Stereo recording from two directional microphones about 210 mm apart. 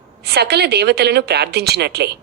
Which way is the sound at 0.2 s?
50° right (ahead or behind).